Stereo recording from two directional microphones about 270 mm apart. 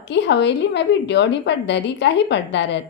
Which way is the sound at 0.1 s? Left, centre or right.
Left.